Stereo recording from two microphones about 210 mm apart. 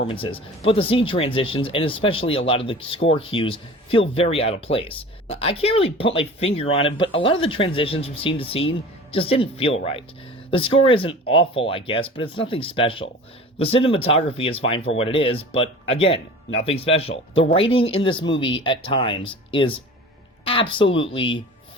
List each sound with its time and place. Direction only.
0.1 s speech: 25° left (ahead or behind)